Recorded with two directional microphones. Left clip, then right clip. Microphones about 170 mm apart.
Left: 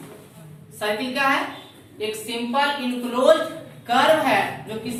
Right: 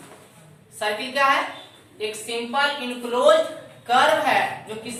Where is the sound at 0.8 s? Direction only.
20° right (ahead or behind).